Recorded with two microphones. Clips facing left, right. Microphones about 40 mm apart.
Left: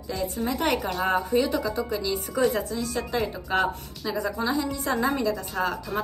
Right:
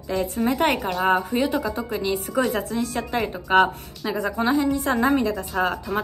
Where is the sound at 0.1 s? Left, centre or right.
Right.